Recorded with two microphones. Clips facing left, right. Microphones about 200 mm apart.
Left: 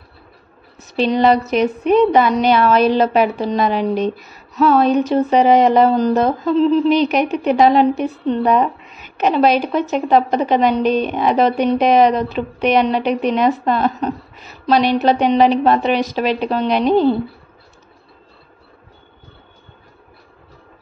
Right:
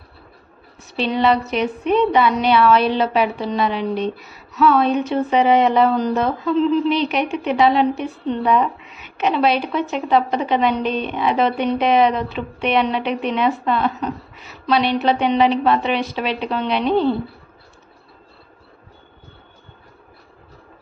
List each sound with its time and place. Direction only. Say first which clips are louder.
0.8 s speech: left 4 dB; 40° left (ahead or behind)